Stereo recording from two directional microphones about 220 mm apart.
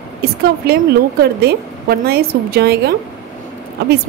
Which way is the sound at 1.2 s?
45° right (ahead or behind).